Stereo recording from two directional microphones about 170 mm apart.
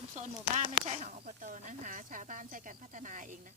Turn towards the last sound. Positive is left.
turn(degrees=-50)  # may be behind; listen again after turning